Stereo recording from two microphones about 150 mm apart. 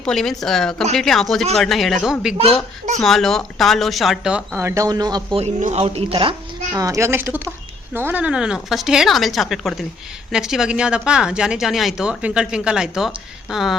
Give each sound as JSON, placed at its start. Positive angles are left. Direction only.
{"t": 0.0, "sound": "speech", "side_deg": 5}
{"t": 4.7, "sound": "speech", "side_deg": -25}
{"t": 5.4, "sound": "speech", "side_deg": -50}
{"t": 6.7, "sound": "speech", "side_deg": -20}